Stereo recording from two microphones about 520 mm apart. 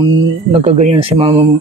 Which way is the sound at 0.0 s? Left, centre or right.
Centre.